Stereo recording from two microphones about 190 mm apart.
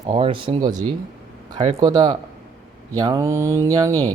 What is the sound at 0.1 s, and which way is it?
Speech, 25° right (ahead or behind).